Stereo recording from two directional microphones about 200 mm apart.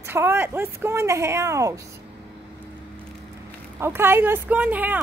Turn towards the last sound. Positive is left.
turn(degrees=-10)  # may be behind; listen again after turning